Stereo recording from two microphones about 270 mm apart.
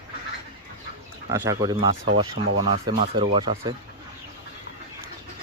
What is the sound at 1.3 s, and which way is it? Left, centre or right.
Speech, centre.